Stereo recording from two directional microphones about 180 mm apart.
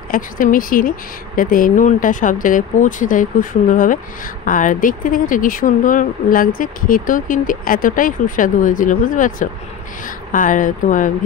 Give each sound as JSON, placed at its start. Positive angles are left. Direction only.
{"t": 0.1, "sound": "speech", "side_deg": 50}